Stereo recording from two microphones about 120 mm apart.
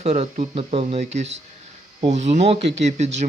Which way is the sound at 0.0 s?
60° right (ahead or behind).